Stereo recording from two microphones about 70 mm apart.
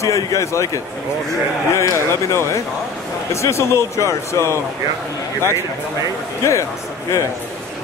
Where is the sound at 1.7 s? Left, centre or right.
Left.